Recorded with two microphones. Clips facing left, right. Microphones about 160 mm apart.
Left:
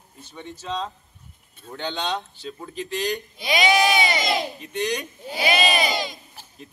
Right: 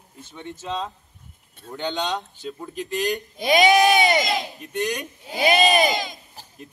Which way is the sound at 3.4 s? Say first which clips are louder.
Right 4 dB; 45° right (ahead or behind).